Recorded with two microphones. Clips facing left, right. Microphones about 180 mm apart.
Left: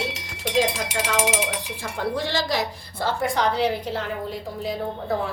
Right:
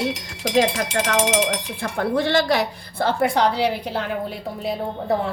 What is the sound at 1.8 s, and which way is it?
A woman's voice, 60° right (ahead or behind).